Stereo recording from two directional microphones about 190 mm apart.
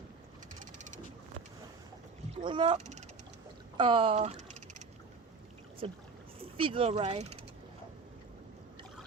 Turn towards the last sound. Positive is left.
turn(degrees=-35)  # may be behind; listen again after turning